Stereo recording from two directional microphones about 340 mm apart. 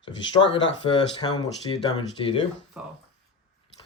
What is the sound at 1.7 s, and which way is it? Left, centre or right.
Speech, centre.